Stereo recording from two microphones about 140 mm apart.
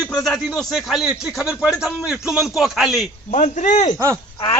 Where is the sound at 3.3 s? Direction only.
55° left (ahead or behind).